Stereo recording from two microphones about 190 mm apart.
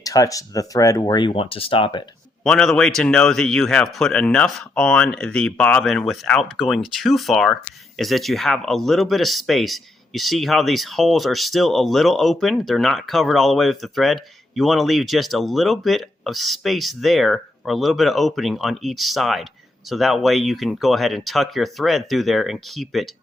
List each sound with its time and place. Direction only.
0.0 s speech: 20° left (ahead or behind)
2.4 s speech: 5° left (ahead or behind)